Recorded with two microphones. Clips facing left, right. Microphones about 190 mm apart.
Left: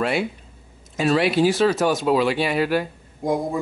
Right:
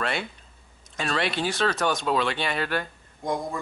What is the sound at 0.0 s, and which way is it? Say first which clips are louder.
Speech: left 7 dB; 5° left (ahead or behind).